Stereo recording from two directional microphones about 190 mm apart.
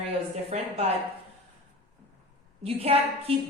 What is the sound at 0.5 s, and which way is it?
Speech, 35° right (ahead or behind).